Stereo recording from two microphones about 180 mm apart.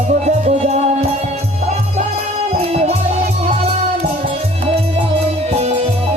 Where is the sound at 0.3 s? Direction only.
40° right (ahead or behind).